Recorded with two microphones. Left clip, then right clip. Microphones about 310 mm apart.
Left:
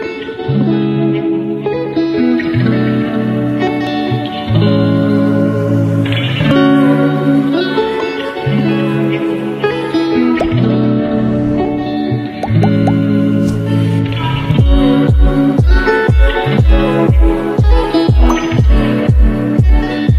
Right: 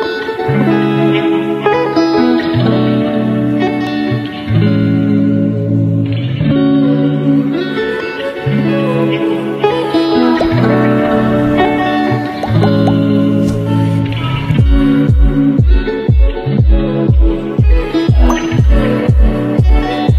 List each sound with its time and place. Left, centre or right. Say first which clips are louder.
0.6 s music: right 1 dB; right
2.7 s music: right 2 dB; centre
4.6 s music: left 2 dB; centre
6.4 s music: left 2 dB; left
8.5 s music: right 2 dB; centre
9.6 s music: right 3 dB; centre
10.8 s music: right 3 dB; right
13.2 s music: right 1 dB; centre
14.5 s music: left 1 dB; centre
16.5 s music: left 3 dB; left
18.0 s music: left 1 dB; centre